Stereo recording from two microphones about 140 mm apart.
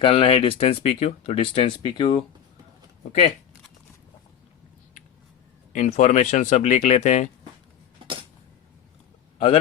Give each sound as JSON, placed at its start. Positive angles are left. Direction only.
{"t": 0.0, "sound": "speech", "side_deg": 45}
{"t": 3.1, "sound": "speech", "side_deg": 45}
{"t": 5.7, "sound": "speech", "side_deg": 60}